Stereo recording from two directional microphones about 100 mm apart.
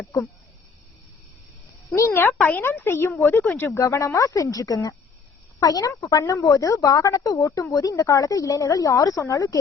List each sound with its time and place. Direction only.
2.0 s speech: 20° left (ahead or behind)
3.8 s a woman's voice: 30° left (ahead or behind)